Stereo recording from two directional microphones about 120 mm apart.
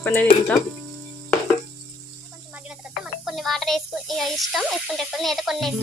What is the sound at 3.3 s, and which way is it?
Speech, centre (ahead or behind).